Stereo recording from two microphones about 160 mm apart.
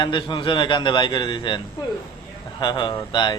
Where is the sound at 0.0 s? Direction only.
30° left (ahead or behind).